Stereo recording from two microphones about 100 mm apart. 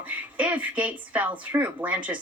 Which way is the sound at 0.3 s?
15° right (ahead or behind).